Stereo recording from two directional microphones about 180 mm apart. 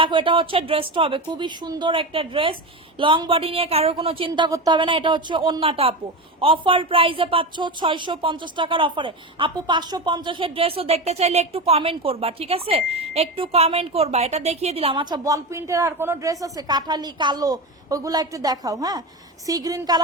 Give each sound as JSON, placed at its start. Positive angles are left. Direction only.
{"t": 0.0, "sound": "a woman's voice", "side_deg": -30}